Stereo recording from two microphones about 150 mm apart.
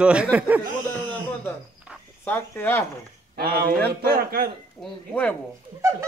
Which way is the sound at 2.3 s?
10° left (ahead or behind).